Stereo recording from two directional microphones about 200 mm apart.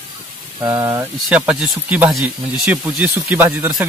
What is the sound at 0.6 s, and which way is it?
Speech, 10° right (ahead or behind).